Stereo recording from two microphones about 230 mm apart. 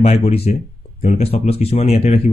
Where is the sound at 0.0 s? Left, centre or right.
Left.